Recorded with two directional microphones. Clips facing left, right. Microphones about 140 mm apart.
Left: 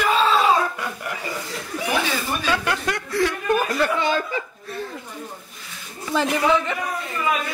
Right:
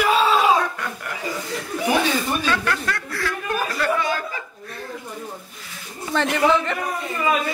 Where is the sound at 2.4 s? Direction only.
15° left (ahead or behind).